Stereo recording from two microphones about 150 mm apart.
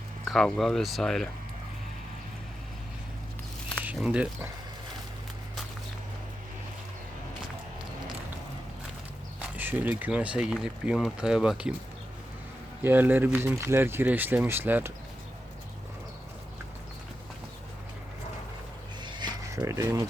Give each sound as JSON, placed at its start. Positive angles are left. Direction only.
{"t": 0.3, "sound": "speech", "side_deg": 0}
{"t": 3.8, "sound": "speech", "side_deg": -10}
{"t": 9.6, "sound": "speech", "side_deg": -10}
{"t": 12.8, "sound": "speech", "side_deg": -10}
{"t": 19.0, "sound": "a sound", "side_deg": -30}